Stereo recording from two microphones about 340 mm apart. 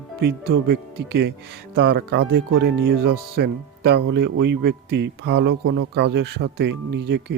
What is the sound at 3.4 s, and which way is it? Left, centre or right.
Speech, right.